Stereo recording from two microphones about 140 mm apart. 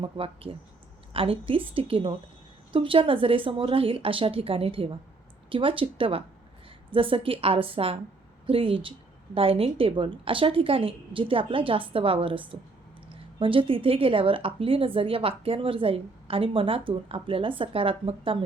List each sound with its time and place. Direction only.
0.0 s a woman's voice: 40° right (ahead or behind)